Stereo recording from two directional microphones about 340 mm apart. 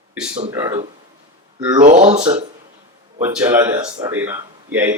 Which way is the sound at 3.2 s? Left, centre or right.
Centre.